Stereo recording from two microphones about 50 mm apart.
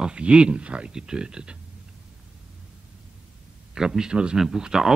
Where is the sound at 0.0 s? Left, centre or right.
Right.